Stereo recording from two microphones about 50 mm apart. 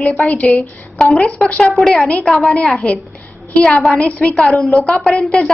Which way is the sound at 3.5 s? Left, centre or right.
Left.